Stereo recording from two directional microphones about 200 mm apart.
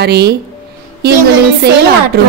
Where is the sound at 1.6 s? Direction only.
55° right (ahead or behind).